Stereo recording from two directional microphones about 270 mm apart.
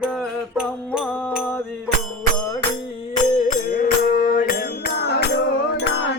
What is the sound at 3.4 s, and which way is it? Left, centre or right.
Music, left.